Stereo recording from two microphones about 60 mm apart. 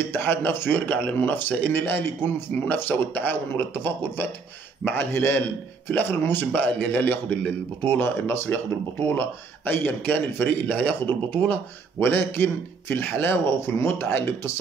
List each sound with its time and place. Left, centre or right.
0.1 s a man's voice: left
12.0 s a man's voice: left
13.6 s speech: left
13.9 s speech: left